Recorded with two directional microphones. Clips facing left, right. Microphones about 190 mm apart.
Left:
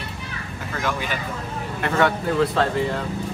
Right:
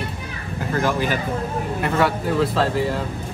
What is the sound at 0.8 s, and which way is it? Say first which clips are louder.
Speech: right 5 dB; 40° right (ahead or behind).